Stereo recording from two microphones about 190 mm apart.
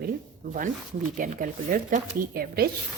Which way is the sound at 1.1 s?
45° right (ahead or behind).